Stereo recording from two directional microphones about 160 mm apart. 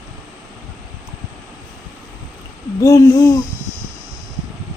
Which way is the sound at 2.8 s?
20° left (ahead or behind).